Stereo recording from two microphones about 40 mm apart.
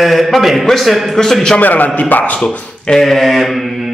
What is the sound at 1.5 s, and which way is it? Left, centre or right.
Speech, left.